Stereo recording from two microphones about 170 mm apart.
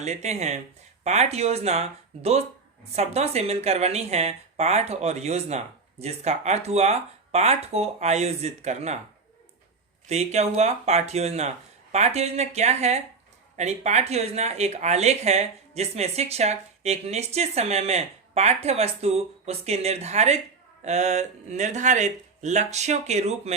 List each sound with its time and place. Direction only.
0.0 s speech: 40° right (ahead or behind)
10.1 s speech: 40° right (ahead or behind)